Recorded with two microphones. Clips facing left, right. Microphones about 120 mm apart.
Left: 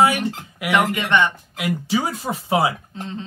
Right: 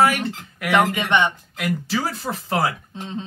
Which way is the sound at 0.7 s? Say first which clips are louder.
Even; 20° right (ahead or behind).